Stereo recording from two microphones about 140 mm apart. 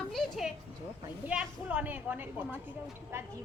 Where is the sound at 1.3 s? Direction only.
10° right (ahead or behind).